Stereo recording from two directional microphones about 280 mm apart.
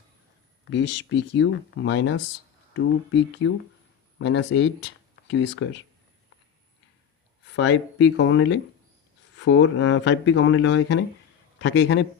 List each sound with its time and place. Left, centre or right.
0.7 s speech: left
3.4 s speech: left
7.5 s speech: left